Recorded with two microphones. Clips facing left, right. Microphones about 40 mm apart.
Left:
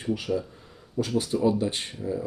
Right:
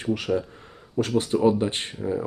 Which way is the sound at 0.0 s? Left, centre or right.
Right.